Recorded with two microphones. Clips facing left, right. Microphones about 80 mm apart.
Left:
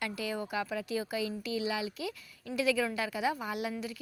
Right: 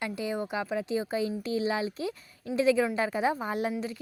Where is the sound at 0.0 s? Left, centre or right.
Right.